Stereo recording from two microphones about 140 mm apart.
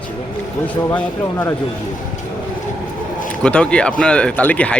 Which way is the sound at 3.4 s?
10° left (ahead or behind).